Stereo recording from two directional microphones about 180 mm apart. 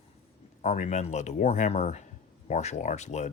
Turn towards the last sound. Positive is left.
turn(degrees=40)  # may be behind; listen again after turning